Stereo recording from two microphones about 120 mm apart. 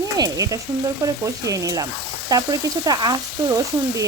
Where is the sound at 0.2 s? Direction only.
30° right (ahead or behind).